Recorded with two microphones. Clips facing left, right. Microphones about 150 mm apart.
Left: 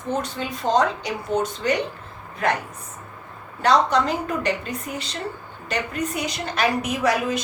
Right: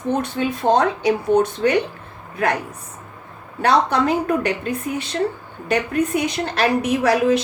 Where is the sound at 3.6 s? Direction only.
60° right (ahead or behind).